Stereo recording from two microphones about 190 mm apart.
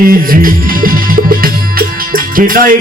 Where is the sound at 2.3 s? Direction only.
45° right (ahead or behind).